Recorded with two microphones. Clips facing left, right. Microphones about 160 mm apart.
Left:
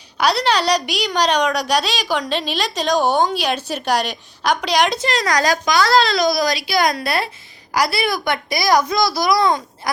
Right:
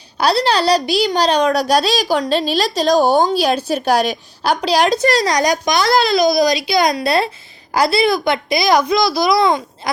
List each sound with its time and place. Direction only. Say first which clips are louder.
0.2 s a woman's voice: right 2 dB; 30° right (ahead or behind)
5.3 s a woman's voice: right 2 dB; 20° right (ahead or behind)